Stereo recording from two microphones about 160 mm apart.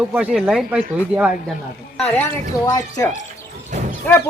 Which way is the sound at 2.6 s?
20° left (ahead or behind).